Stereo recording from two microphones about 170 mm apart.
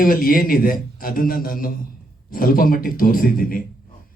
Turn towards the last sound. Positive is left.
turn(degrees=55)  # may be behind; listen again after turning